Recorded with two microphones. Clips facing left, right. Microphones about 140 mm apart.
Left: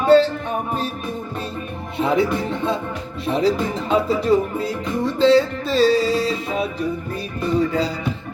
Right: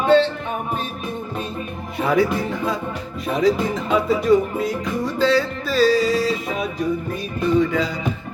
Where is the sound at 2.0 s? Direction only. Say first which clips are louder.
Even; 25° left (ahead or behind).